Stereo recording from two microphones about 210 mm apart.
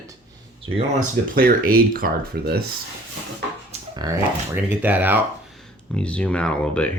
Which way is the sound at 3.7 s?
20° right (ahead or behind).